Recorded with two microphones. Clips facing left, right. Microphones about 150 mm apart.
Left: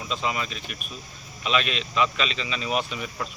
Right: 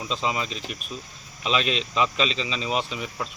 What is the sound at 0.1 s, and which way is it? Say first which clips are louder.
Speech: right 1 dB; 25° right (ahead or behind).